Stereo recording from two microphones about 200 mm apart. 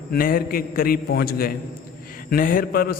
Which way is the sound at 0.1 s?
45° left (ahead or behind).